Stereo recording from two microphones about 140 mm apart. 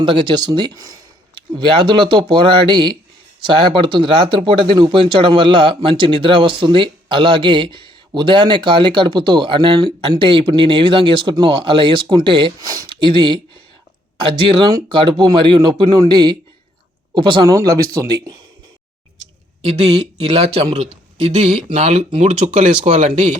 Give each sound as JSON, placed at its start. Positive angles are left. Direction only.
{"t": 0.0, "sound": "speech", "side_deg": -35}
{"t": 1.5, "sound": "speech", "side_deg": -40}
{"t": 14.5, "sound": "speech", "side_deg": -35}
{"t": 20.0, "sound": "speech", "side_deg": -45}